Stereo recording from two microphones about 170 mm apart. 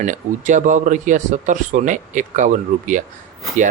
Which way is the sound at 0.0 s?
45° right (ahead or behind).